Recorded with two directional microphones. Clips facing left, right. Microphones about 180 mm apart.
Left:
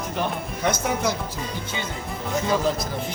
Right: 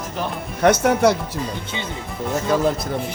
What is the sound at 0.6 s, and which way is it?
Speech, 70° right (ahead or behind).